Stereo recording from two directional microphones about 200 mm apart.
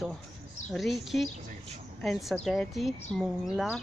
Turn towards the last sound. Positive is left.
turn(degrees=0)  # may be behind; listen again after turning